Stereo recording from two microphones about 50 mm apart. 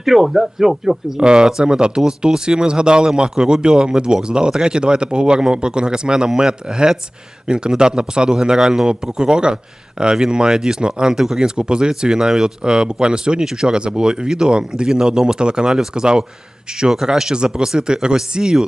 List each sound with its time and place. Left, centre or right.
0.0 s speech: centre
1.2 s speech: centre